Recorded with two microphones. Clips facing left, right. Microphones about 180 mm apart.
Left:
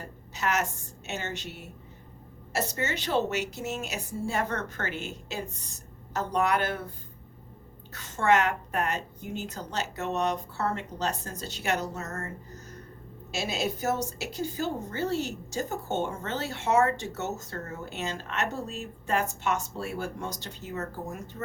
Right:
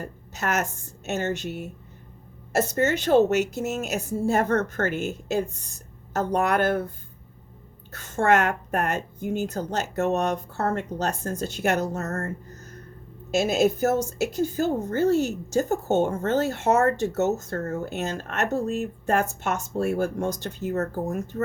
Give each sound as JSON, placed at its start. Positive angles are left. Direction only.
{"t": 0.0, "sound": "a woman's voice", "side_deg": -50}
{"t": 7.9, "sound": "a woman's voice", "side_deg": -50}
{"t": 13.3, "sound": "a woman's voice", "side_deg": -50}